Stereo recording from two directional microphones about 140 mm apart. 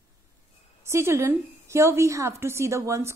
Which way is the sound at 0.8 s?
20° right (ahead or behind).